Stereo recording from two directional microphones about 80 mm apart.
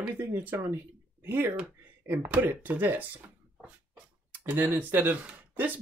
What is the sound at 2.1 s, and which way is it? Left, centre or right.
Speech, centre.